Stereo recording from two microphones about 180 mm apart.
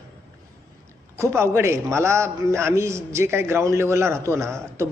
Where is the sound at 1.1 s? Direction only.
15° right (ahead or behind).